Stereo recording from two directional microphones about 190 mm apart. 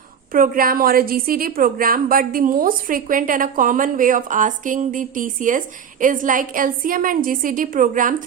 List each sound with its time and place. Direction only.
0.3 s a woman's voice: 50° right (ahead or behind)